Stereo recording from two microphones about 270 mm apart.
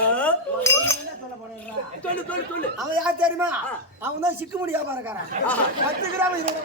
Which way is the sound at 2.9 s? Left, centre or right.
Centre.